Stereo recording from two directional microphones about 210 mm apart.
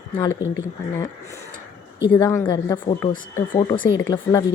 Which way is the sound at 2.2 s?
10° left (ahead or behind).